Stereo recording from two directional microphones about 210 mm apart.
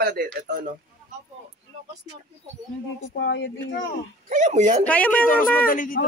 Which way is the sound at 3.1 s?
60° left (ahead or behind).